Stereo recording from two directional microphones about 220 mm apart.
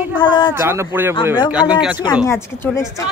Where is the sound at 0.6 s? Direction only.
10° right (ahead or behind).